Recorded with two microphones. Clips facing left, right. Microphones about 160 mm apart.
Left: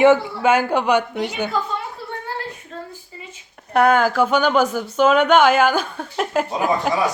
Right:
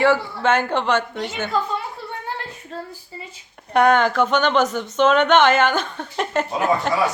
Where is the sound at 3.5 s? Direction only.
5° left (ahead or behind).